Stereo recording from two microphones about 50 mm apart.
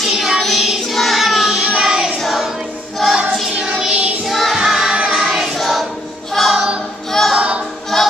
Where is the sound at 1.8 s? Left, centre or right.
Centre.